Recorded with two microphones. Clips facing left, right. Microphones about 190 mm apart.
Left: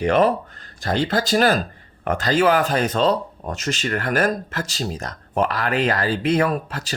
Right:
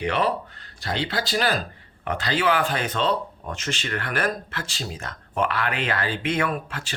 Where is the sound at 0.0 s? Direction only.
45° left (ahead or behind).